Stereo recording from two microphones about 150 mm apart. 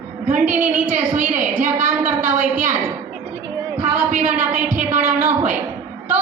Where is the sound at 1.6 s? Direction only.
55° right (ahead or behind).